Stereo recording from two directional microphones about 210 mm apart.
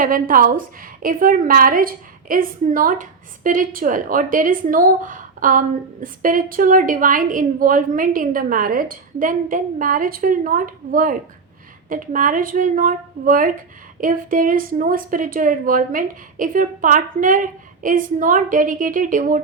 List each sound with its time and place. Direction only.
0.0 s a woman's voice: 40° right (ahead or behind)